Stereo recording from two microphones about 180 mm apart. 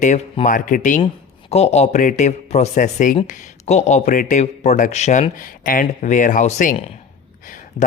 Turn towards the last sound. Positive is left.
turn(degrees=45)  # may be behind; listen again after turning